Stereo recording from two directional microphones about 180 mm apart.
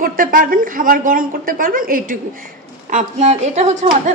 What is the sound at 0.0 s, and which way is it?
A woman's voice, 50° right (ahead or behind).